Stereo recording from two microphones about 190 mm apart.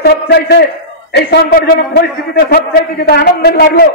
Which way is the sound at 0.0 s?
60° left (ahead or behind).